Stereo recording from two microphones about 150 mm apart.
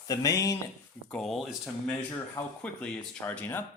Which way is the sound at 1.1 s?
Centre (ahead or behind).